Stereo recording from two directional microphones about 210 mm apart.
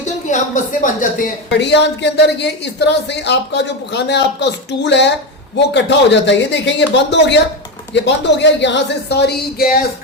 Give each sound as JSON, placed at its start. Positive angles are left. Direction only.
{"t": 0.0, "sound": "speech", "side_deg": 35}
{"t": 1.5, "sound": "speech", "side_deg": 55}